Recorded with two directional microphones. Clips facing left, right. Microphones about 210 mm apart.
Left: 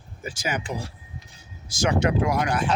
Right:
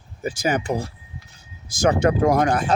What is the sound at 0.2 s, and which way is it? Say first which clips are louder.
Speech: right 7 dB; 40° right (ahead or behind).